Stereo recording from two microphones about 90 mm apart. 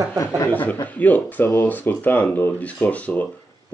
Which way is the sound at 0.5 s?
20° left (ahead or behind).